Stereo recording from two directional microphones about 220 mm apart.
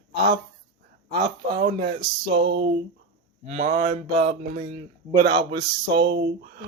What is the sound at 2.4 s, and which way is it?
Speech, 55° right (ahead or behind).